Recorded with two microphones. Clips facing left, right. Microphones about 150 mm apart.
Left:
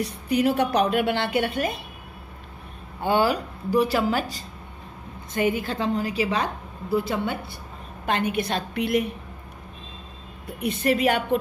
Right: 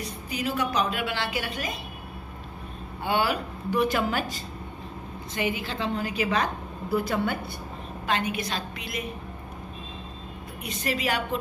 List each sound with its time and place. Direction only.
0.0 s a woman's voice: 65° left (ahead or behind)
3.0 s speech: 40° left (ahead or behind)
7.1 s a woman's voice: 20° left (ahead or behind)
8.1 s a woman's voice: 55° left (ahead or behind)
10.6 s a woman's voice: 55° left (ahead or behind)